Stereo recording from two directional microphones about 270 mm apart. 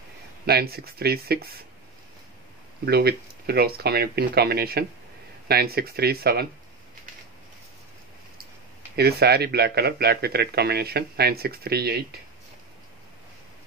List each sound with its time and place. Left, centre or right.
0.5 s speech: right
2.8 s speech: right
8.9 s speech: right